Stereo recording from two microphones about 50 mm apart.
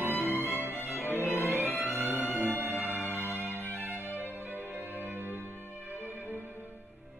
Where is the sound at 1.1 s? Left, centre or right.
Left.